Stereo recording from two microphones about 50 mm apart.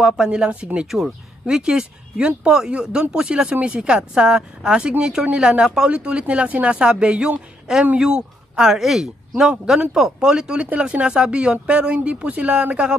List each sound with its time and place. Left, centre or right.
0.3 s a woman's voice: right
0.8 s speech: centre
1.4 s a woman's voice: centre